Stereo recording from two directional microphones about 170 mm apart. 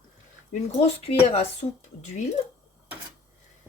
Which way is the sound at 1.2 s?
35° left (ahead or behind).